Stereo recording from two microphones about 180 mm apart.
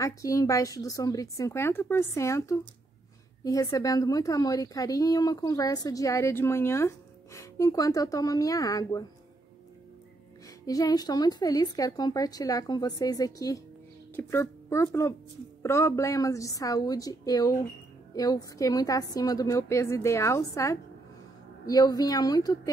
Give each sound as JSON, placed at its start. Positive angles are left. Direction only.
{"t": 0.0, "sound": "a woman's voice", "side_deg": 20}
{"t": 10.6, "sound": "a woman's voice", "side_deg": 20}